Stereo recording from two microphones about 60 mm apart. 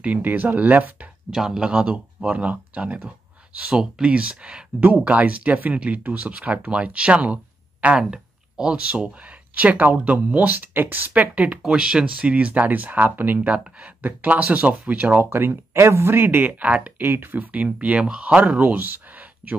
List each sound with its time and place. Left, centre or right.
0.0 s speech: right
1.3 s speech: centre; by 11.6 s right
11.6 s speech: centre
15.2 s speech: right; by 16.9 s centre
17.0 s speech: right; by 18.4 s centre
18.4 s speech: right